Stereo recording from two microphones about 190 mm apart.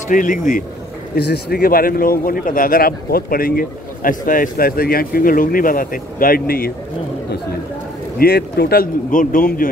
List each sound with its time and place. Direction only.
0.1 s speech: 45° left (ahead or behind)
1.1 s speech: 55° left (ahead or behind)
8.2 s speech: 55° left (ahead or behind)